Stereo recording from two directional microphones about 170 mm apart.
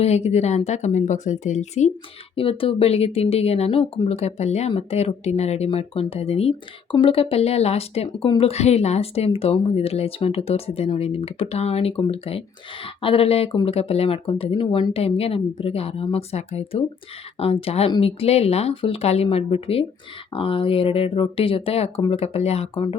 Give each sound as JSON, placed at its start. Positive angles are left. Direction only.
{"t": 0.0, "sound": "speech", "side_deg": 40}
{"t": 2.3, "sound": "speech", "side_deg": 35}